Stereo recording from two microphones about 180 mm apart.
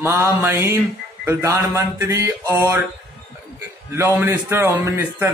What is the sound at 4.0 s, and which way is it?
A man's voice, 10° right (ahead or behind).